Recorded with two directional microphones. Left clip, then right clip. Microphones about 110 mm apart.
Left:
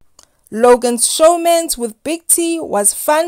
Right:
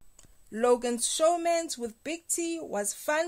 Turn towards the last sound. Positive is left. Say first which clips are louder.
# left 15 dB
turn(degrees=55)  # may be behind; listen again after turning